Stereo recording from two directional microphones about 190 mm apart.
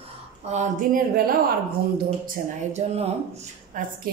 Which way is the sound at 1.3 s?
55° right (ahead or behind).